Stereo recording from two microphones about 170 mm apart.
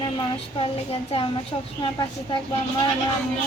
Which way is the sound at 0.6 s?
35° left (ahead or behind).